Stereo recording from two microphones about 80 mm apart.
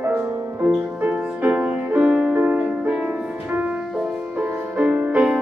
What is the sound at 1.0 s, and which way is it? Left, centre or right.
Music, centre.